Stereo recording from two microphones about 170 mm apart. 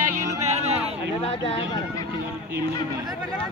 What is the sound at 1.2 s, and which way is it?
Speech, 30° left (ahead or behind).